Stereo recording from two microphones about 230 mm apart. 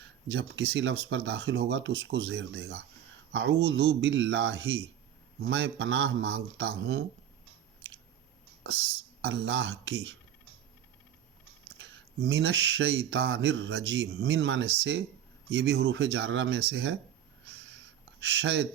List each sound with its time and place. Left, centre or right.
0.3 s speech: right
9.2 s speech: right
11.8 s speech: right
18.4 s speech: right